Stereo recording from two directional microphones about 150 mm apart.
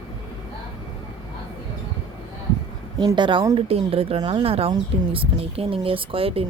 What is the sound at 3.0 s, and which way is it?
Speech, 30° right (ahead or behind).